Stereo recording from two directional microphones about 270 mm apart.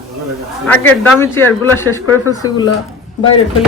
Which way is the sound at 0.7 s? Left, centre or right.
Centre.